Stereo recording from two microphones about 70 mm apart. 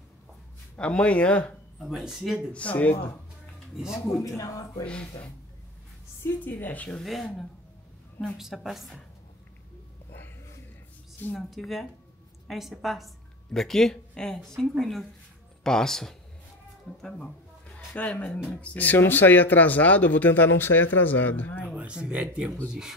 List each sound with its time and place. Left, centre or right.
0.7 s speech: centre
1.8 s speech: centre
2.5 s speech: centre
4.8 s speech: centre
6.2 s speech: left
7.0 s speech: centre
8.4 s speech: centre
11.3 s a woman's voice: centre
17.9 s speech: left
21.7 s speech: centre